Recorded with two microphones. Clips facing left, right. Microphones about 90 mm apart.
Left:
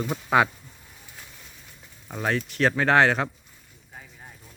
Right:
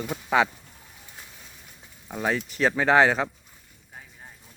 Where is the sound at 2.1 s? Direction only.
5° right (ahead or behind).